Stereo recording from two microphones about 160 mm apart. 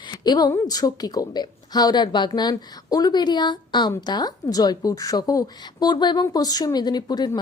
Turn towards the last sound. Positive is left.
turn(degrees=25)  # may be behind; listen again after turning